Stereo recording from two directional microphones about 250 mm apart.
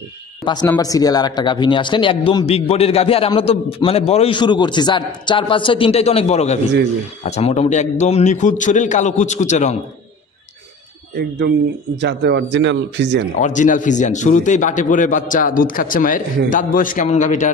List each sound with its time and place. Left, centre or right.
0.4 s speech: centre
12.0 s speech: right
13.4 s a man's voice: left